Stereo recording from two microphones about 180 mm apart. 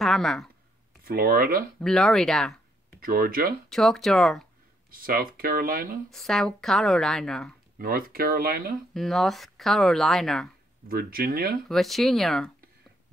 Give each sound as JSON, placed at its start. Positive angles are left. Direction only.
{"t": 0.0, "sound": "a woman's voice", "side_deg": 0}
{"t": 1.0, "sound": "speech", "side_deg": -55}
{"t": 1.8, "sound": "speech", "side_deg": 5}
{"t": 3.0, "sound": "speech", "side_deg": -55}
{"t": 3.6, "sound": "speech", "side_deg": 0}
{"t": 4.9, "sound": "speech", "side_deg": -50}
{"t": 6.0, "sound": "speech", "side_deg": 0}
{"t": 7.8, "sound": "speech", "side_deg": -55}
{"t": 8.9, "sound": "speech", "side_deg": 0}
{"t": 10.9, "sound": "speech", "side_deg": -55}
{"t": 11.7, "sound": "speech", "side_deg": 0}